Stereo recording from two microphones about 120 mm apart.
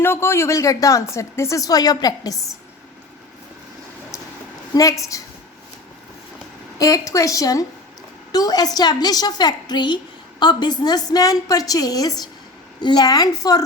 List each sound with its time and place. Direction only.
0.0 s speech: 20° left (ahead or behind)
4.7 s speech: 30° left (ahead or behind)
6.7 s a woman's voice: 30° left (ahead or behind)